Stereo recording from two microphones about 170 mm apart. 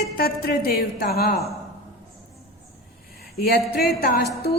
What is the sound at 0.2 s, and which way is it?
Speech, 60° left (ahead or behind).